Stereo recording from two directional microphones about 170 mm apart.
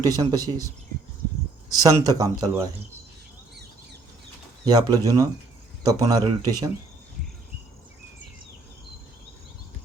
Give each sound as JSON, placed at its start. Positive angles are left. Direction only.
{"t": 0.0, "sound": "speech", "side_deg": -20}
{"t": 1.7, "sound": "speech", "side_deg": -20}
{"t": 4.6, "sound": "speech", "side_deg": -20}